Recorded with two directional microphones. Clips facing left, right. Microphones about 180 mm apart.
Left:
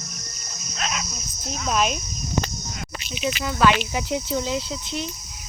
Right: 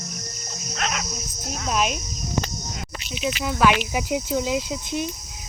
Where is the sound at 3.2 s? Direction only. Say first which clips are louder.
Even; 5° right (ahead or behind).